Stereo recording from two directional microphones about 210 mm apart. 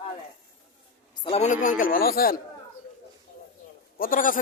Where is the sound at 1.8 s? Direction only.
45° left (ahead or behind).